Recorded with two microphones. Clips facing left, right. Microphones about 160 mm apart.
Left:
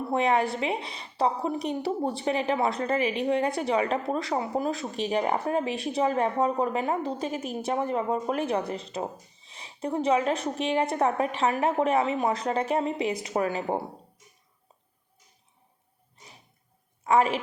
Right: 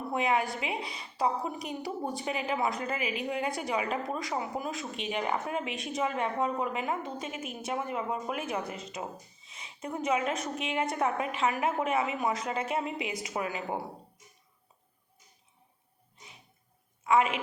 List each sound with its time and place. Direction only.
0.1 s a woman's voice: 35° left (ahead or behind)
17.0 s a woman's voice: 35° left (ahead or behind)